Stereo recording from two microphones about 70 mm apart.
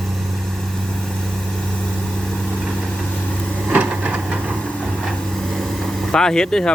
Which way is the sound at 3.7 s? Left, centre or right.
Right.